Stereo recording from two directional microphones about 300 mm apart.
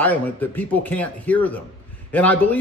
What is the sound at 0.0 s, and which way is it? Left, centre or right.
A man's voice, centre.